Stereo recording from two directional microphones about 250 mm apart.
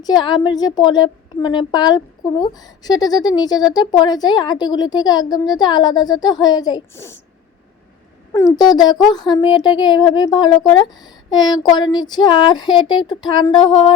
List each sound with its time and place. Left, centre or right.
0.0 s a woman's voice: centre
8.4 s a woman's voice: centre